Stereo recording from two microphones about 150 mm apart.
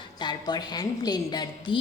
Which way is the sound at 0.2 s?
30° left (ahead or behind).